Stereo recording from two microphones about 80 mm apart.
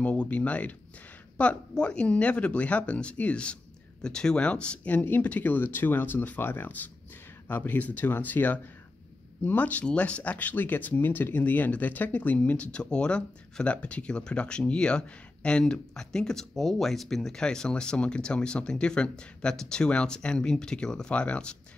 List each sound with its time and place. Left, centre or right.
0.0 s speech: centre